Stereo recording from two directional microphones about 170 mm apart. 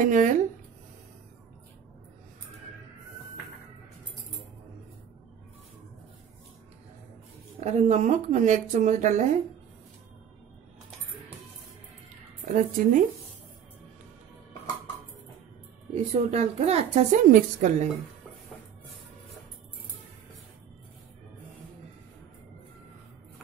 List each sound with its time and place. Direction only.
0.0 s speech: 50° right (ahead or behind)
7.6 s speech: 40° right (ahead or behind)
12.5 s speech: 55° right (ahead or behind)
15.9 s a woman's voice: 40° right (ahead or behind)